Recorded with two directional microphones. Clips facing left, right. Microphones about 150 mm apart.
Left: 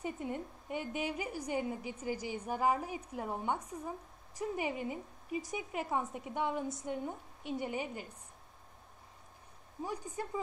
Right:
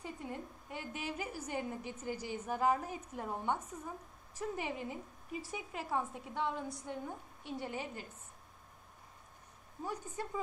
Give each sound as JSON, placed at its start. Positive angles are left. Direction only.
{"t": 0.0, "sound": "a woman's voice", "side_deg": 20}
{"t": 9.8, "sound": "a woman's voice", "side_deg": 15}